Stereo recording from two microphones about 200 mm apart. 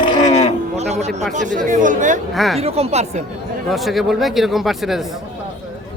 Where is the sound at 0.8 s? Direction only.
35° right (ahead or behind).